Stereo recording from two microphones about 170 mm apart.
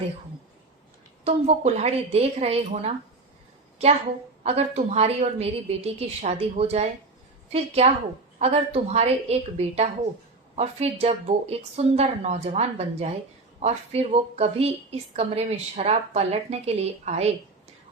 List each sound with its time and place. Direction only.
1.2 s a woman's voice: 40° right (ahead or behind)
4.4 s a woman's voice: 40° right (ahead or behind)